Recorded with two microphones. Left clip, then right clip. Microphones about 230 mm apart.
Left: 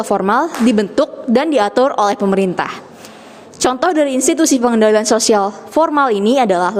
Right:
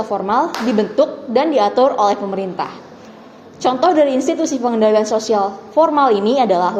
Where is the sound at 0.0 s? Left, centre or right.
Left.